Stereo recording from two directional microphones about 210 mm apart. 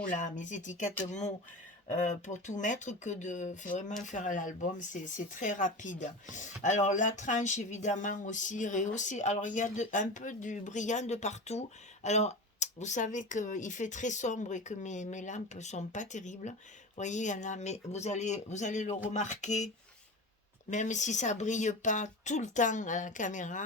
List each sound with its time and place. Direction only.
0.1 s speech: 35° left (ahead or behind)
1.9 s speech: 35° left (ahead or behind)